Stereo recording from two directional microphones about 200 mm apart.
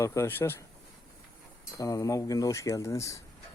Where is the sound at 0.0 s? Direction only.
15° left (ahead or behind).